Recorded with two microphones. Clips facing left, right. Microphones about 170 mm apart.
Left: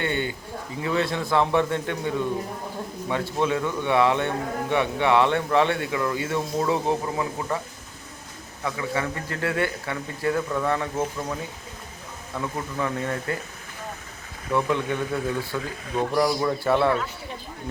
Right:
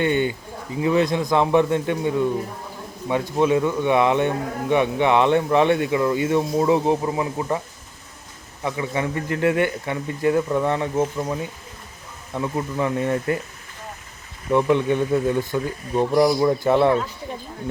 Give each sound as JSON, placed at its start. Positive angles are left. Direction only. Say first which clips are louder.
{"t": 0.0, "sound": "a sound", "louder": "right 6 dB", "side_deg": -15}
{"t": 0.8, "sound": "a man's voice", "louder": "right 6 dB", "side_deg": -20}
{"t": 8.6, "sound": "speech", "louder": "right 3 dB", "side_deg": -25}
{"t": 12.3, "sound": "speech", "louder": "right 5 dB", "side_deg": -25}
{"t": 14.5, "sound": "speech", "louder": "right 6 dB", "side_deg": -20}